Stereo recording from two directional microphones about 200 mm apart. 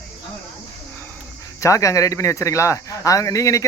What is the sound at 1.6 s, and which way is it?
Speech, 15° left (ahead or behind).